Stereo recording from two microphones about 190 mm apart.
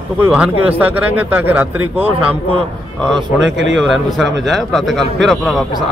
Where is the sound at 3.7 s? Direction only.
Centre (ahead or behind).